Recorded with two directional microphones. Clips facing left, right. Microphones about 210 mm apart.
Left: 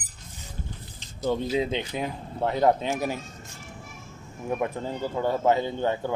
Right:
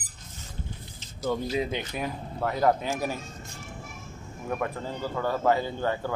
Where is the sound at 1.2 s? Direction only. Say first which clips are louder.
Left 2 dB; 25° left (ahead or behind).